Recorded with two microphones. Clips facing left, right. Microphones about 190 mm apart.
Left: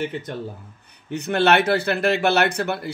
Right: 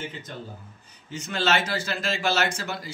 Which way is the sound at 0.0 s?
65° left (ahead or behind).